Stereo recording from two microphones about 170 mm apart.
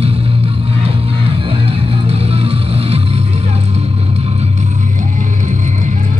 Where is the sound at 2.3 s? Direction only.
35° right (ahead or behind).